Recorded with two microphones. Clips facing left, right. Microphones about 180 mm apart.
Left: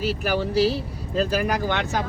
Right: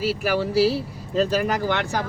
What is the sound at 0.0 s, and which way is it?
Speech, 5° right (ahead or behind).